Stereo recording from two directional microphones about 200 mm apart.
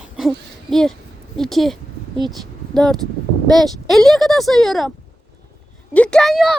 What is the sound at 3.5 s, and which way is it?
Speech, centre (ahead or behind).